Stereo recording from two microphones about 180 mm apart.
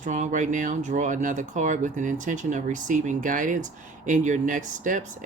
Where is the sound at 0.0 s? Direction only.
45° right (ahead or behind).